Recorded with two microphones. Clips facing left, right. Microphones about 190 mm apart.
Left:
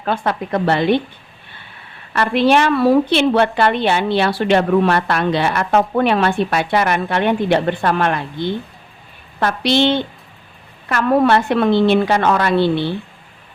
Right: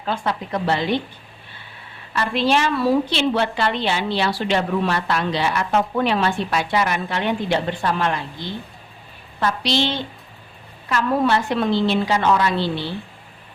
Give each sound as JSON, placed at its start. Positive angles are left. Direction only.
{"t": 0.0, "sound": "a woman's voice", "side_deg": 60}
{"t": 2.1, "sound": "a woman's voice", "side_deg": 60}